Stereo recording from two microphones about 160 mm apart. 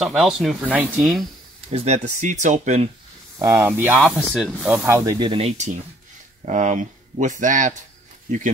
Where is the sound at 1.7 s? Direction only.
40° right (ahead or behind).